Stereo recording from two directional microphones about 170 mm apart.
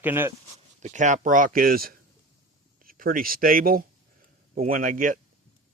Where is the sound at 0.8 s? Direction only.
45° right (ahead or behind).